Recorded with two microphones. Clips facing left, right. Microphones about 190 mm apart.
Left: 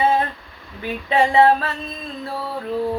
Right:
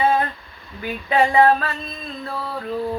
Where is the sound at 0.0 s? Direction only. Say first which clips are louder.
Even; 25° left (ahead or behind).